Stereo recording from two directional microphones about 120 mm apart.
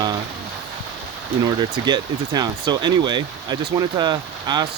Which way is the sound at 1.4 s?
35° right (ahead or behind).